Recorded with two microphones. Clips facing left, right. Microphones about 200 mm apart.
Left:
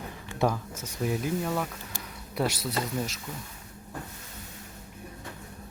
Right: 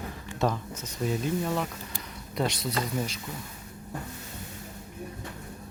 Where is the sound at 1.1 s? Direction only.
5° left (ahead or behind).